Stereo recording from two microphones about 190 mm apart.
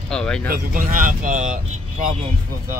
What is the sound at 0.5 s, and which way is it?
Speech, 45° right (ahead or behind).